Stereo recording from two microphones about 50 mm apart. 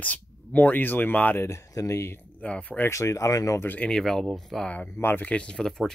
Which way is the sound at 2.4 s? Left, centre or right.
Left.